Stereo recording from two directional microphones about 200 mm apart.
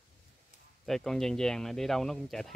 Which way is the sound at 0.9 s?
Centre (ahead or behind).